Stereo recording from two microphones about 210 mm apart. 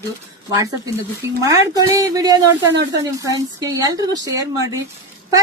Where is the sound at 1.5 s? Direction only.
15° right (ahead or behind).